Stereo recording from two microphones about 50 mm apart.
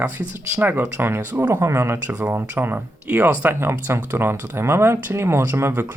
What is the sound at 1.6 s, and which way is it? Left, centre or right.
Speech, right.